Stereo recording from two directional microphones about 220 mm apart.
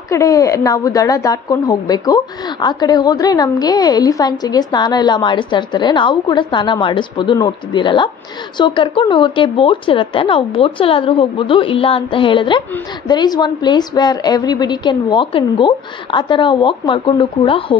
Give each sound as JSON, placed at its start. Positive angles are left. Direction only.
{"t": 0.1, "sound": "a woman's voice", "side_deg": 15}